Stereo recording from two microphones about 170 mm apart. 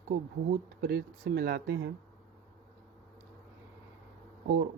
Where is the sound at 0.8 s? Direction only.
75° right (ahead or behind); by 1.9 s 90° right.